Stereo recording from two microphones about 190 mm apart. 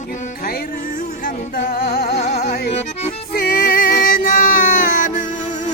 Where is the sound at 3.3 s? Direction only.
50° left (ahead or behind).